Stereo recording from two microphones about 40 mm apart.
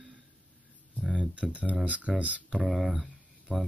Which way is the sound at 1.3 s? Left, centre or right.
Right.